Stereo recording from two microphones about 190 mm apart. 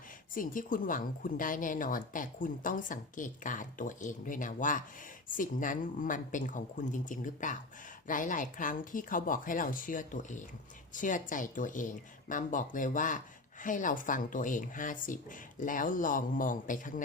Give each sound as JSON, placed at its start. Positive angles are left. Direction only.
{"t": 0.3, "sound": "speech", "side_deg": 45}